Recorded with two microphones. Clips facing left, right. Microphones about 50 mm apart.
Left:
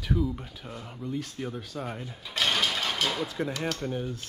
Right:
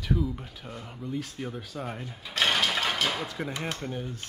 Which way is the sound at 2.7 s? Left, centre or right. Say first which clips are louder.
Right 2 dB; centre.